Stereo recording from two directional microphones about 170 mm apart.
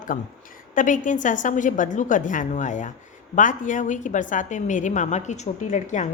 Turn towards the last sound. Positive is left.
turn(degrees=45)  # may be behind; listen again after turning